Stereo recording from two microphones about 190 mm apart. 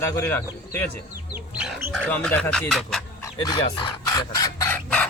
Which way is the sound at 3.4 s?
25° left (ahead or behind).